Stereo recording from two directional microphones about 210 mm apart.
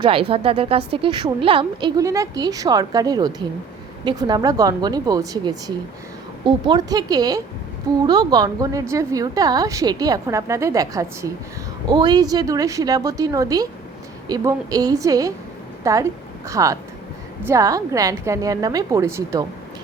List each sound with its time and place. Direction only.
0.0 s a woman's voice: 25° right (ahead or behind)